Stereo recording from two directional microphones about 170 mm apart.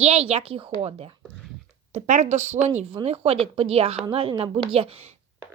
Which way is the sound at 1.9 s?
45° right (ahead or behind).